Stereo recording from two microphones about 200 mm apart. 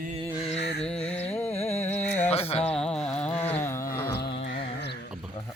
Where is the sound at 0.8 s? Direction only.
5° left (ahead or behind).